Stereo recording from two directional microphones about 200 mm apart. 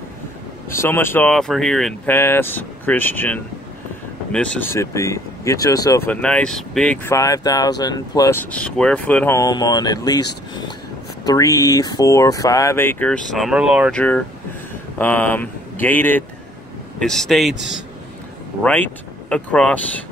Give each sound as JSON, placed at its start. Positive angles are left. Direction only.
{"t": 0.7, "sound": "speech", "side_deg": 10}
{"t": 7.1, "sound": "speech", "side_deg": 15}
{"t": 11.2, "sound": "speech", "side_deg": 15}
{"t": 15.0, "sound": "speech", "side_deg": 10}
{"t": 18.6, "sound": "speech", "side_deg": 5}